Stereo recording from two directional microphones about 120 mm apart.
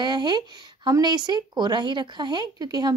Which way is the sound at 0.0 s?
35° right (ahead or behind).